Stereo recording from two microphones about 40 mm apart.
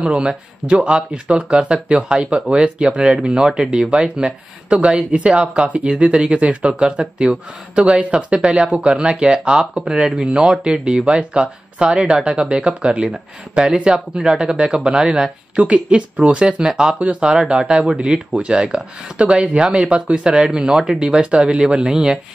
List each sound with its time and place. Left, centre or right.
0.0 s speech: right
15.5 s speech: right
21.3 s speech: right